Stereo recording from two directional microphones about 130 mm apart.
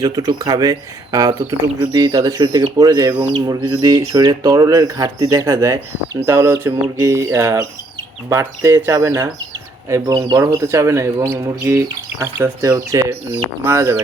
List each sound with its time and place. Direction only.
0.0 s speech: 30° right (ahead or behind)